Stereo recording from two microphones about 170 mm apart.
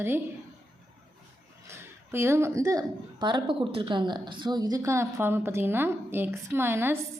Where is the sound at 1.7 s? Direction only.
15° right (ahead or behind).